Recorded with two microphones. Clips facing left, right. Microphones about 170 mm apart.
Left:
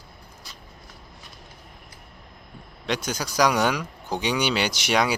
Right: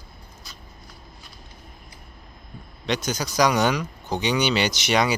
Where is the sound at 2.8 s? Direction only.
5° left (ahead or behind).